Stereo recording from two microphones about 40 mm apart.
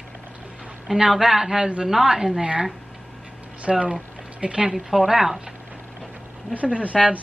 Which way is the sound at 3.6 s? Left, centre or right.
Right.